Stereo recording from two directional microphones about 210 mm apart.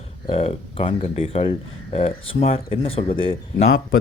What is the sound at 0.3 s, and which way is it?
Speech, 25° left (ahead or behind).